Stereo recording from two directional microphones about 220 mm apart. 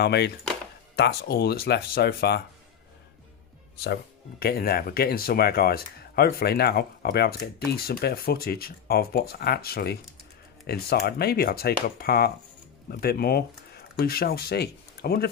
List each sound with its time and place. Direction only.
0.0 s speech: 50° left (ahead or behind)
3.8 s speech: 45° left (ahead or behind)